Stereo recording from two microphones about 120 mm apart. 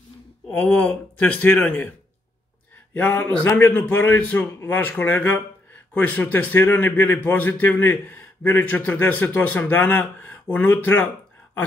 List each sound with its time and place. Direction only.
0.5 s a man's voice: 10° left (ahead or behind)